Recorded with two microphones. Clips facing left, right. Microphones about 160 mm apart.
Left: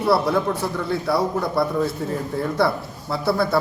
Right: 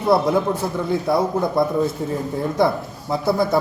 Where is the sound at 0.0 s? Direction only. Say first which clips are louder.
Right 2 dB; 20° right (ahead or behind).